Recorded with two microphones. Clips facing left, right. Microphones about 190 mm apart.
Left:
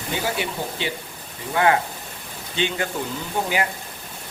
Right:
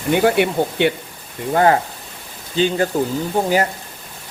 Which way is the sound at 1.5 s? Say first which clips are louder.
Right 5 dB; 40° right (ahead or behind).